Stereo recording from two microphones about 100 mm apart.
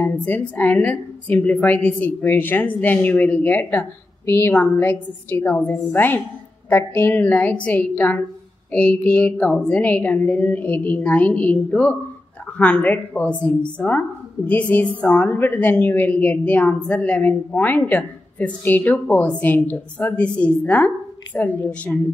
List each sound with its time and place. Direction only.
0.0 s a woman's voice: 15° left (ahead or behind)